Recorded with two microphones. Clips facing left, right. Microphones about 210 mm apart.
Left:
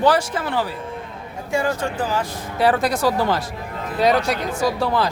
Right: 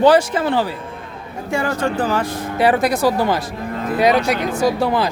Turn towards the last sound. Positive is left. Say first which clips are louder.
# right 3 dB
turn(degrees=-15)  # may be behind; listen again after turning